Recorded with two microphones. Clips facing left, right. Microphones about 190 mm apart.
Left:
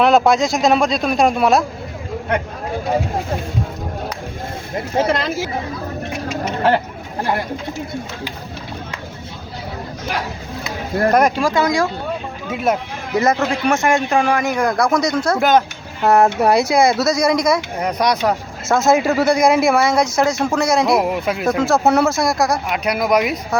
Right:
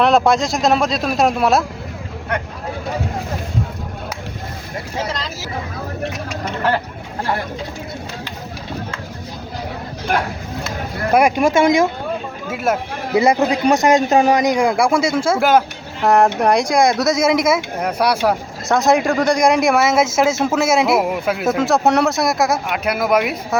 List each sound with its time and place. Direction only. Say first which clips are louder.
0.0 s speech: left 1 dB; centre (ahead or behind)
4.9 s speech: left 8 dB; 55° left (ahead or behind)
10.1 s speech: right 5 dB; 50° right (ahead or behind)
11.1 s a man's voice: right 3 dB; 10° right (ahead or behind)
11.4 s speech: right 3 dB; 25° right (ahead or behind)
12.5 s a man's voice: left 1 dB; 5° right (ahead or behind)